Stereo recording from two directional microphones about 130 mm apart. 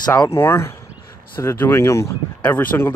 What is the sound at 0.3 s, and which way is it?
Speech, 20° left (ahead or behind).